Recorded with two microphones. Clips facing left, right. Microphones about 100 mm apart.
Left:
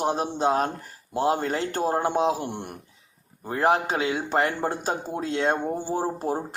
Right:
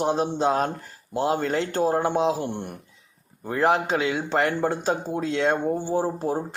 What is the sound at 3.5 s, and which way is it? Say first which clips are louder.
Speech: right 1 dB; 35° left (ahead or behind).